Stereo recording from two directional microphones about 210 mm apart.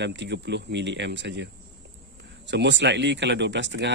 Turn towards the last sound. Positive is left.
turn(degrees=-60)  # may be behind; listen again after turning